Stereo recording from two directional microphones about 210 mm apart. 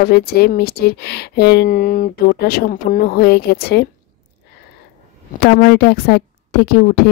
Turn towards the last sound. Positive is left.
turn(degrees=50)  # may be behind; listen again after turning